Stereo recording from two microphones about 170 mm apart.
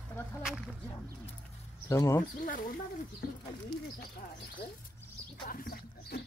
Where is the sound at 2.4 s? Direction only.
55° left (ahead or behind).